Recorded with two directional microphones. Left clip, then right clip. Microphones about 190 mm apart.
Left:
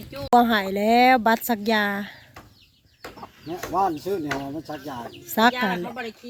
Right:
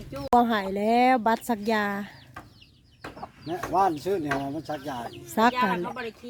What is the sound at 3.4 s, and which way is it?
Speech, 15° right (ahead or behind).